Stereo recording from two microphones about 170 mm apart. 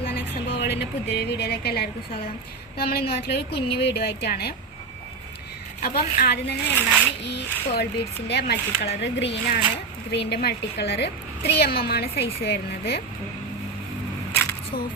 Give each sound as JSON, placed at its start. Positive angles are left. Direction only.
{"t": 0.6, "sound": "a woman's voice", "side_deg": 80}
{"t": 5.8, "sound": "a woman's voice", "side_deg": 60}
{"t": 6.7, "sound": "speech", "side_deg": 10}
{"t": 7.2, "sound": "speech", "side_deg": 90}
{"t": 9.0, "sound": "a woman's voice", "side_deg": 90}